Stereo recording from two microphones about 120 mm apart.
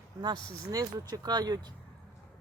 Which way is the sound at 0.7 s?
30° right (ahead or behind).